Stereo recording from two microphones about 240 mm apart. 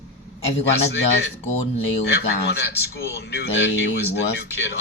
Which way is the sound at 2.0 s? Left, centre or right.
Left.